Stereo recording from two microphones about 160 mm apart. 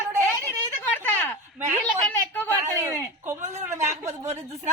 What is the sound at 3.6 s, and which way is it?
Speech, 15° right (ahead or behind).